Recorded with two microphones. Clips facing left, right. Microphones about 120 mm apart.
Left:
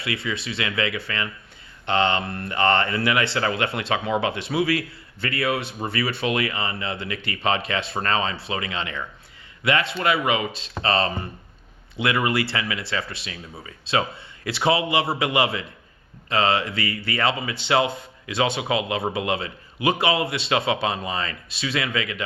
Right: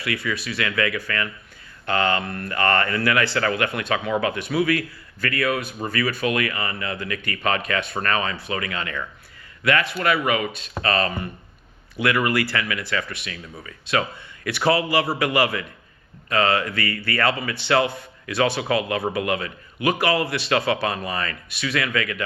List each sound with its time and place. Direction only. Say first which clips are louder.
0.0 s speech: right 1 dB; 25° left (ahead or behind)